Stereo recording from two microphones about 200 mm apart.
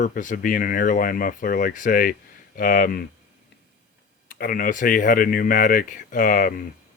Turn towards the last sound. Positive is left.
turn(degrees=45)  # may be behind; listen again after turning